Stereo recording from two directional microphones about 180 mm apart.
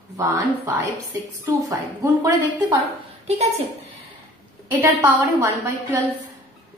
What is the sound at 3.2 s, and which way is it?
Speech, 35° right (ahead or behind).